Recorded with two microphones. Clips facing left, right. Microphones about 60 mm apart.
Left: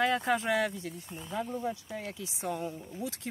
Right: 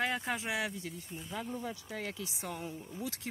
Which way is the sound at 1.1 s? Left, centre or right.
Left.